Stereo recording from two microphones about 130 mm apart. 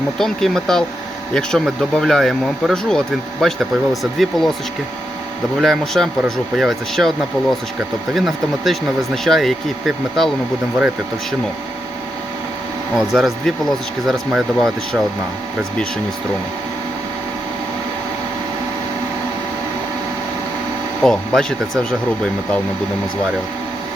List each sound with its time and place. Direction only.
0.2 s speech: 5° left (ahead or behind)
5.5 s speech: centre (ahead or behind)
8.1 s speech: centre (ahead or behind)
13.0 s speech: centre (ahead or behind)
21.0 s speech: 5° left (ahead or behind)